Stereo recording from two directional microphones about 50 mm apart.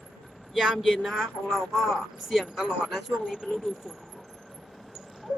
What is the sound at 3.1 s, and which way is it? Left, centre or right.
Speech, centre.